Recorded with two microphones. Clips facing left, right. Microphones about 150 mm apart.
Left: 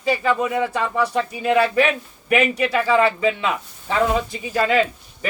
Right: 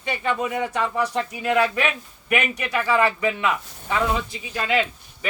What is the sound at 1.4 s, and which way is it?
Speech, 30° left (ahead or behind).